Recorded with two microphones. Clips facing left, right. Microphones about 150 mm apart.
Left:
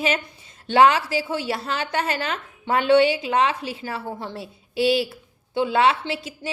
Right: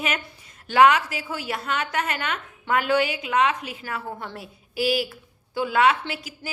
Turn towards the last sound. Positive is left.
turn(degrees=30)  # may be behind; listen again after turning